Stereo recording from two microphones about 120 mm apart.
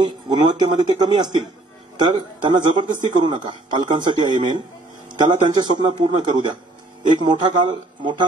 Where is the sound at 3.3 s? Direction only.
40° right (ahead or behind).